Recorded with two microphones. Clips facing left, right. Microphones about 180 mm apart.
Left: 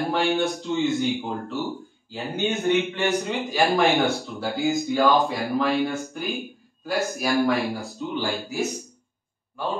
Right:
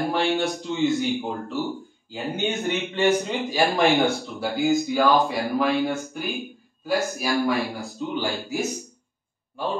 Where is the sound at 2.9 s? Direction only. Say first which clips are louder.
Right 3 dB; centre (ahead or behind).